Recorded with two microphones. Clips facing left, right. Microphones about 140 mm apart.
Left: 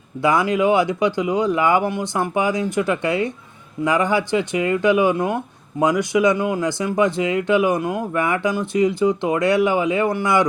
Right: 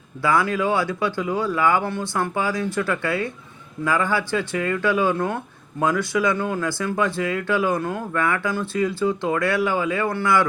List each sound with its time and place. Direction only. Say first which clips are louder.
0.2 s speech: left 3 dB; 20° left (ahead or behind)